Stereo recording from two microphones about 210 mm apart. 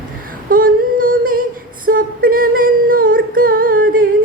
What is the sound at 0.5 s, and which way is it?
Singing, 40° right (ahead or behind).